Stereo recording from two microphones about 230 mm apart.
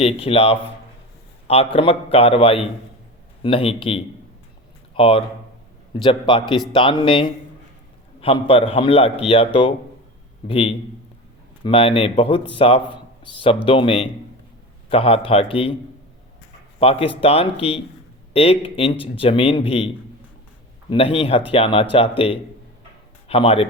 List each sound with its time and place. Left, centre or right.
0.0 s a man's voice: left
16.8 s speech: left
20.9 s speech: left